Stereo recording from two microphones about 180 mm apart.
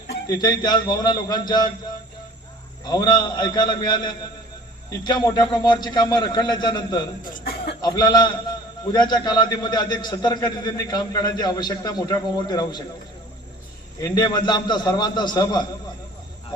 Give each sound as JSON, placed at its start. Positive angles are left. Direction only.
{"t": 0.3, "sound": "a man's voice", "side_deg": 25}
{"t": 2.8, "sound": "a man's voice", "side_deg": 20}
{"t": 7.3, "sound": "a sound", "side_deg": 55}
{"t": 7.8, "sound": "a man's voice", "side_deg": 25}
{"t": 14.0, "sound": "a man's voice", "side_deg": 25}